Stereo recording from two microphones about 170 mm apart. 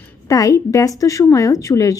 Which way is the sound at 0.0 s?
20° left (ahead or behind).